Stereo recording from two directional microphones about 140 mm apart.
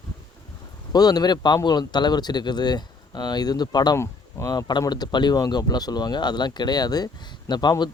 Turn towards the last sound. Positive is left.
turn(degrees=30)  # may be behind; listen again after turning